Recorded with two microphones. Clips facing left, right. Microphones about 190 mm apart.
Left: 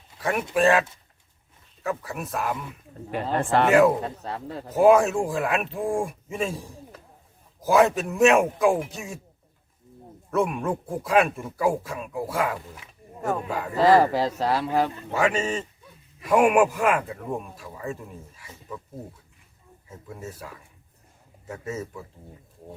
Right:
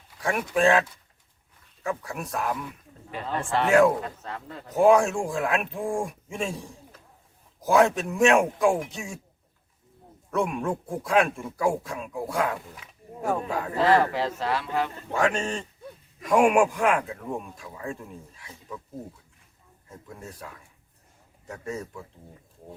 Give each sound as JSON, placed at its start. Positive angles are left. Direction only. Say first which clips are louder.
{"t": 0.2, "sound": "speech", "louder": "left 1 dB", "side_deg": 0}
{"t": 3.7, "sound": "speech", "louder": "even", "side_deg": 0}
{"t": 3.9, "sound": "speech", "louder": "left 3 dB", "side_deg": 30}
{"t": 4.7, "sound": "speech", "louder": "left 2 dB", "side_deg": 0}
{"t": 10.3, "sound": "speech", "louder": "left 2 dB", "side_deg": 0}
{"t": 14.1, "sound": "speech", "louder": "left 3 dB", "side_deg": 40}
{"t": 15.1, "sound": "speech", "louder": "even", "side_deg": 5}
{"t": 19.9, "sound": "speech", "louder": "left 3 dB", "side_deg": 5}